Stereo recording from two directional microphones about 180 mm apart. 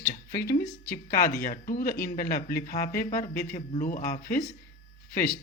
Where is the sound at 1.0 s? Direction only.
50° left (ahead or behind).